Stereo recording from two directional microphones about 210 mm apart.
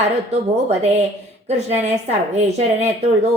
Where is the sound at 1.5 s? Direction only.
30° right (ahead or behind).